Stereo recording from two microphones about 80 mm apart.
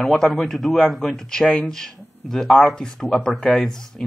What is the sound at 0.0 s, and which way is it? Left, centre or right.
Speech, centre.